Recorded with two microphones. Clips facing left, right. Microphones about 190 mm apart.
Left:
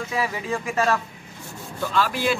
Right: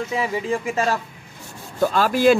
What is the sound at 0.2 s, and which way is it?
Speech, 25° right (ahead or behind).